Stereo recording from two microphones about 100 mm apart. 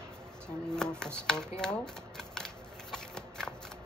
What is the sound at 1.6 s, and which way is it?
Shuffling cards, 5° left (ahead or behind).